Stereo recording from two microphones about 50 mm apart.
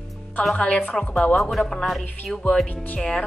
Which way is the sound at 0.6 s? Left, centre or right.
Left.